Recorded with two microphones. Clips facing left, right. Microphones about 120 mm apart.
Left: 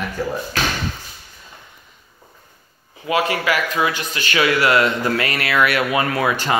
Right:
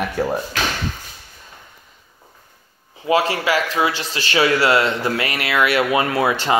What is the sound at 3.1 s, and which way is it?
Speech, 30° right (ahead or behind).